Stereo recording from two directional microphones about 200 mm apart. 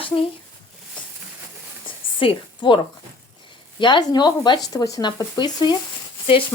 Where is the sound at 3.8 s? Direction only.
20° left (ahead or behind).